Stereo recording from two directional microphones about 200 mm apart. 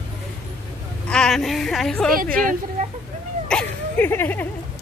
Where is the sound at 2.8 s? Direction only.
40° right (ahead or behind).